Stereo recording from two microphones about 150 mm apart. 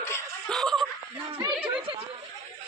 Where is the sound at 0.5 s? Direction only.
Centre (ahead or behind).